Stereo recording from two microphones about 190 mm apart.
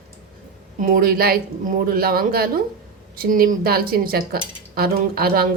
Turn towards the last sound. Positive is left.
turn(degrees=-55)  # may be behind; listen again after turning